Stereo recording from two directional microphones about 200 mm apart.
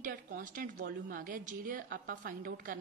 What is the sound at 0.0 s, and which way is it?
A woman's voice, 45° right (ahead or behind).